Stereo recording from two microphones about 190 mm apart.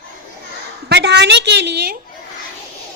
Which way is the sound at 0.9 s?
65° right (ahead or behind).